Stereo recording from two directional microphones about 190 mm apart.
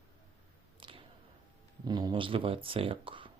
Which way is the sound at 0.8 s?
30° right (ahead or behind).